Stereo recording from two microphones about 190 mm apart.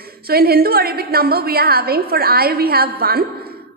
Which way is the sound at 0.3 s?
55° right (ahead or behind).